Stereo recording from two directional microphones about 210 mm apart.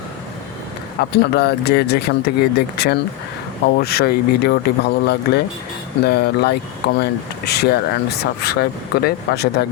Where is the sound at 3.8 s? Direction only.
50° left (ahead or behind).